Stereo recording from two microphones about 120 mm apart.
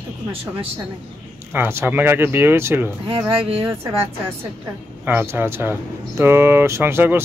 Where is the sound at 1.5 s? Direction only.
20° right (ahead or behind).